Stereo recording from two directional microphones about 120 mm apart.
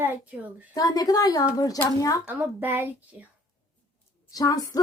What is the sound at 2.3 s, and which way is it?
Speech, 15° right (ahead or behind).